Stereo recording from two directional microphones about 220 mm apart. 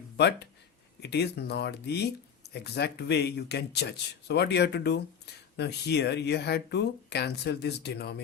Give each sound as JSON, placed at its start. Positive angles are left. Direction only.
{"t": 0.2, "sound": "speech", "side_deg": 50}